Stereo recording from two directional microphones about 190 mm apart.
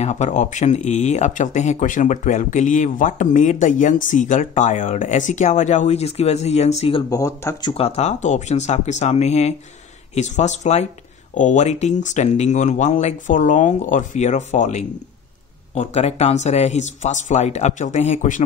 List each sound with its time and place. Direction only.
0.0 s speech: 35° left (ahead or behind); by 7.7 s 15° left (ahead or behind)
7.7 s speech: 35° left (ahead or behind)